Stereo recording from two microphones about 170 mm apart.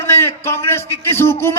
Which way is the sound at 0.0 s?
15° left (ahead or behind).